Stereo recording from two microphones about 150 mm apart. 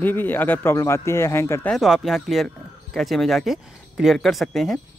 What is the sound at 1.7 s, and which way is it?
Speech, centre (ahead or behind).